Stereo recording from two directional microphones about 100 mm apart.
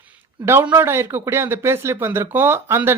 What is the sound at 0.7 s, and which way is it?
Speech, 25° right (ahead or behind).